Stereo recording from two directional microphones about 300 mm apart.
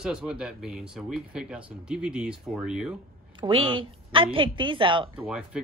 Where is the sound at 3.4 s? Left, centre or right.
Centre.